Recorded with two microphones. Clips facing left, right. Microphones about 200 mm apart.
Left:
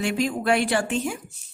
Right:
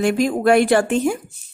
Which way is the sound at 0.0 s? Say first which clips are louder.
Right 7 dB; 50° right (ahead or behind).